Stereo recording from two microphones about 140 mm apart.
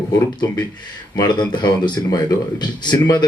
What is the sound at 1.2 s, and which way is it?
Speech, 30° left (ahead or behind).